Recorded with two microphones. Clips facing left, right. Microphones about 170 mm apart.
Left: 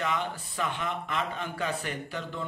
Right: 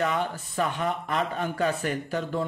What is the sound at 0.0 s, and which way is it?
Speech, 45° right (ahead or behind).